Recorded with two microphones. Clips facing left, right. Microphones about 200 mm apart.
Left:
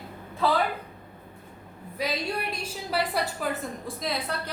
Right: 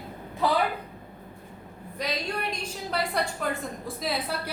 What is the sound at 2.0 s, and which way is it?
A woman's voice, 5° left (ahead or behind).